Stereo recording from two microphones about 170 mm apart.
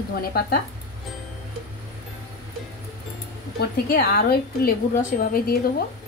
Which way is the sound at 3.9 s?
60° left (ahead or behind).